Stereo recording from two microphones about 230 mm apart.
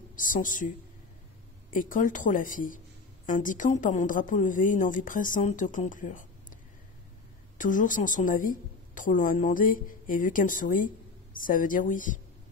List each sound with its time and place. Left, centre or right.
0.1 s speech: left
1.7 s a woman's voice: left